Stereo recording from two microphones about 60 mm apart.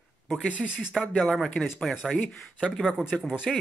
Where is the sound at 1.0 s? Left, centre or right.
Left.